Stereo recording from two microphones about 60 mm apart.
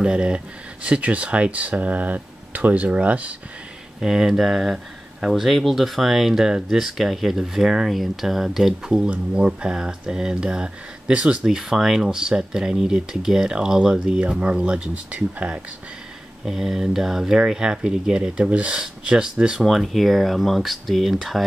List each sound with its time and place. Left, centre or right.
0.0 s speech: centre
4.0 s speech: centre
11.4 s speech: centre; by 15.6 s right
16.4 s speech: centre
19.6 s speech: centre